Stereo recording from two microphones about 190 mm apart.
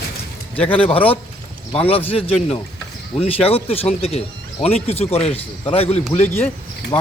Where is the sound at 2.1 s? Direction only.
30° left (ahead or behind).